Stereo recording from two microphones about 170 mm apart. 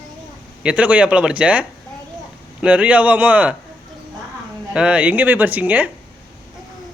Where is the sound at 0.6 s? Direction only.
5° right (ahead or behind).